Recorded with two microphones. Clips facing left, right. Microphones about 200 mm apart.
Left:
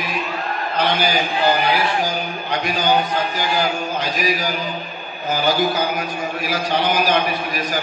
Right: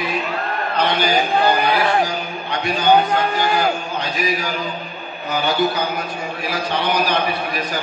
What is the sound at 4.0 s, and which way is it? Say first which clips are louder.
A man's voice: left 1 dB; 40° left (ahead or behind).